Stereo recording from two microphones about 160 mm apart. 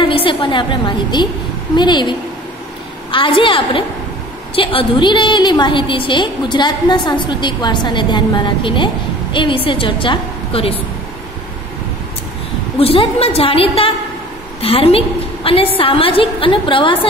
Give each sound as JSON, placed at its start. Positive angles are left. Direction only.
{"t": 0.0, "sound": "a woman's voice", "side_deg": 30}
{"t": 12.7, "sound": "a woman's voice", "side_deg": 35}